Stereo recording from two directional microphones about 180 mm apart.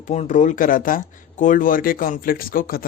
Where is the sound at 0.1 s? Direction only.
40° left (ahead or behind).